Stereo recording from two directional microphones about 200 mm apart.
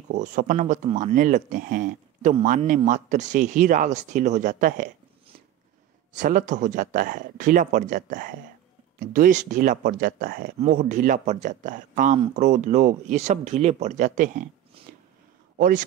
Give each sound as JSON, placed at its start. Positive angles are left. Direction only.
{"t": 0.1, "sound": "speech", "side_deg": -40}
{"t": 6.1, "sound": "speech", "side_deg": -40}
{"t": 14.8, "sound": "a sound", "side_deg": -30}
{"t": 15.5, "sound": "a man's voice", "side_deg": -45}